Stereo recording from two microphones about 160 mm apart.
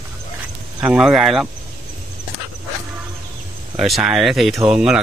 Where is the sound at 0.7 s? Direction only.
5° right (ahead or behind).